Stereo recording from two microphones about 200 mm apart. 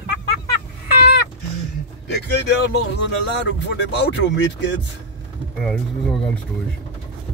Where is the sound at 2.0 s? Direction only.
55° left (ahead or behind).